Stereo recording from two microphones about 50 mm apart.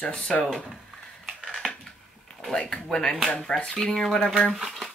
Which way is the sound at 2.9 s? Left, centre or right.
Centre.